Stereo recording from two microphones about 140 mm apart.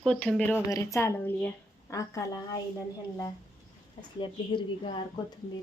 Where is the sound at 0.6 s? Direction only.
20° left (ahead or behind).